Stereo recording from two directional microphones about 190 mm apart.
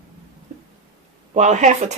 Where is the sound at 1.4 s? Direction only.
40° right (ahead or behind).